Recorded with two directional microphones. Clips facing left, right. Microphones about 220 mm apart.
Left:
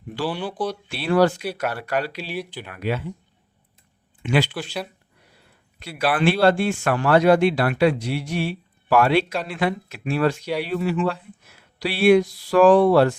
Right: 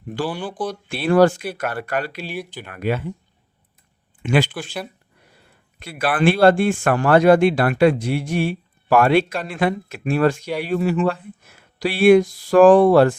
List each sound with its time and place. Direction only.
0.3 s speech: centre (ahead or behind)
0.9 s speech: 50° right (ahead or behind)
4.2 s speech: 50° right (ahead or behind)
5.8 s speech: 50° right (ahead or behind)